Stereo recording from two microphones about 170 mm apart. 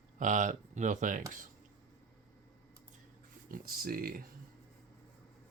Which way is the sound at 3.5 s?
60° right (ahead or behind).